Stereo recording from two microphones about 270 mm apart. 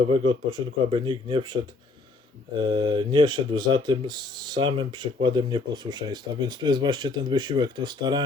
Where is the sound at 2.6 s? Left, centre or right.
Centre.